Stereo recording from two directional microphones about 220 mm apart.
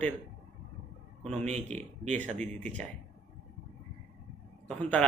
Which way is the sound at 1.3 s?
30° right (ahead or behind).